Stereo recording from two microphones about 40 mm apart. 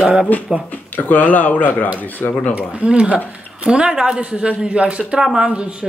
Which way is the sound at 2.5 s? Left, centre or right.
Right.